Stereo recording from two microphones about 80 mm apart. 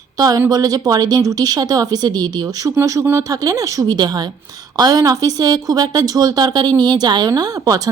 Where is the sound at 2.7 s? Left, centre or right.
Right.